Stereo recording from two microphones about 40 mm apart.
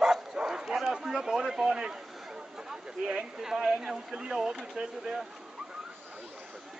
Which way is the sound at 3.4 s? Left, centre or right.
Centre.